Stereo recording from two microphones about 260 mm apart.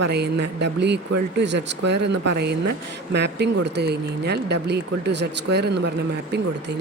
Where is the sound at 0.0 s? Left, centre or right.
Right.